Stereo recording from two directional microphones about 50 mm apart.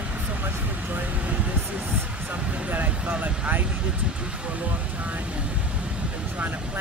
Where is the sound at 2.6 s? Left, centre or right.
Right.